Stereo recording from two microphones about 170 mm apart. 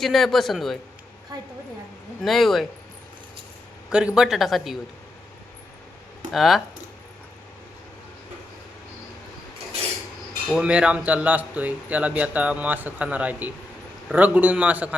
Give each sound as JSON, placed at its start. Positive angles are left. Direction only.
{"t": 0.0, "sound": "speech", "side_deg": 0}
{"t": 1.3, "sound": "a woman's voice", "side_deg": -20}
{"t": 2.2, "sound": "speech", "side_deg": 0}
{"t": 3.8, "sound": "speech", "side_deg": -5}
{"t": 6.3, "sound": "speech", "side_deg": 0}
{"t": 10.5, "sound": "speech", "side_deg": -5}